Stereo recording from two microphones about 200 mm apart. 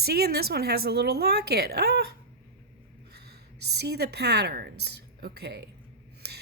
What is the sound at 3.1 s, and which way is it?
A woman's voice, 55° right (ahead or behind).